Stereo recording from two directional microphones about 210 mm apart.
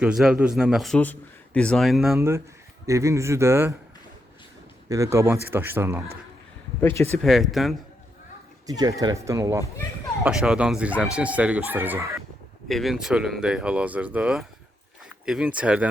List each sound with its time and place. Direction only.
0.0 s a man's voice: 5° right (ahead or behind)
2.1 s speech: 10° right (ahead or behind)
4.9 s speech: 15° right (ahead or behind)
6.8 s speech: 10° left (ahead or behind)
7.2 s a man's voice: centre (ahead or behind)
8.6 s speech: 15° right (ahead or behind)
10.2 s speech: 5° right (ahead or behind)
12.6 s a man's voice: centre (ahead or behind)